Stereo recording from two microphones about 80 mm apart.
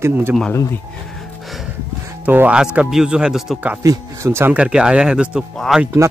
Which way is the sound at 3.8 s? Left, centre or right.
Right.